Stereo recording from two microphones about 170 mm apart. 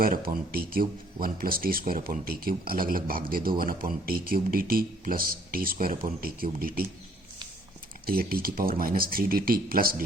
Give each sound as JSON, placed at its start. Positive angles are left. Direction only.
{"t": 0.0, "sound": "speech", "side_deg": -55}
{"t": 8.0, "sound": "speech", "side_deg": -60}